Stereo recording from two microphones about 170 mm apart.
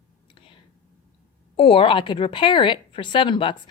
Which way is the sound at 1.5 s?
35° left (ahead or behind).